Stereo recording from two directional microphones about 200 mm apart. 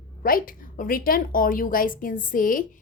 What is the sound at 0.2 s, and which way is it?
Speech, 45° left (ahead or behind).